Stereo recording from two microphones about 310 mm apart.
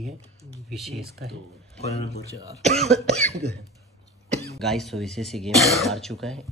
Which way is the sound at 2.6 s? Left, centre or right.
Centre.